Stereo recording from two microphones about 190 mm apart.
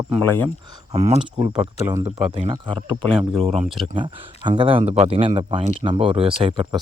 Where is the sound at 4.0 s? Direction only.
25° right (ahead or behind).